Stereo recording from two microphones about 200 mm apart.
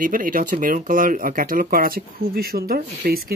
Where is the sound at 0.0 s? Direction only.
45° right (ahead or behind).